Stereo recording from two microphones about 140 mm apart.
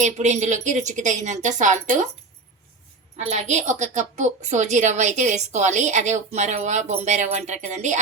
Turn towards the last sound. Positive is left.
turn(degrees=-60)  # may be behind; listen again after turning